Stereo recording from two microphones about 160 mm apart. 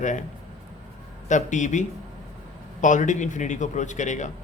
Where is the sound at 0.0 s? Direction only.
50° left (ahead or behind).